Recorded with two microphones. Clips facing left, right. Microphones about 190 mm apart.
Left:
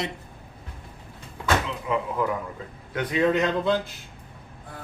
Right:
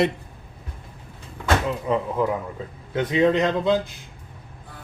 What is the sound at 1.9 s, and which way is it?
Speech, 35° right (ahead or behind).